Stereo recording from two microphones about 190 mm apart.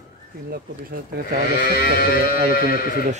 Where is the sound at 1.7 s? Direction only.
50° left (ahead or behind).